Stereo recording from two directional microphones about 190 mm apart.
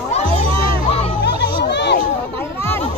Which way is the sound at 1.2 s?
65° left (ahead or behind).